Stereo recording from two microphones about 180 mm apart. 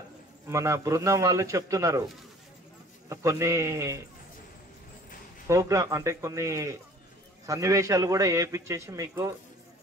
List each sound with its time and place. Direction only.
0.5 s a man's voice: 15° right (ahead or behind)
3.1 s a man's voice: 15° right (ahead or behind)
5.5 s a man's voice: 15° right (ahead or behind)